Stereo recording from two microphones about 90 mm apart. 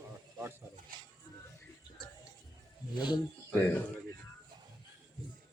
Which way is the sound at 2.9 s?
55° left (ahead or behind).